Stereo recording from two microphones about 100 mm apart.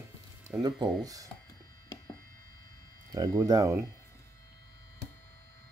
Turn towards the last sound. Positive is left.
turn(degrees=-35)  # may be behind; listen again after turning